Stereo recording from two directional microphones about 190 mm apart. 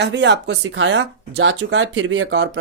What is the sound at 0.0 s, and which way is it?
Speech, 70° right (ahead or behind).